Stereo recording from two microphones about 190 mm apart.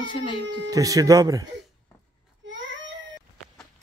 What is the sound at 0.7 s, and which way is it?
Speech, 20° right (ahead or behind).